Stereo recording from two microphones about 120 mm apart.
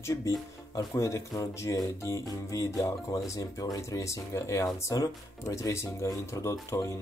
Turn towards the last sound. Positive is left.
turn(degrees=25)  # may be behind; listen again after turning